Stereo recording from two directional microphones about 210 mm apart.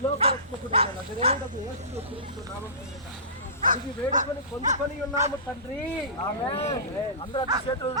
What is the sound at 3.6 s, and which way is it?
Speech, 40° right (ahead or behind).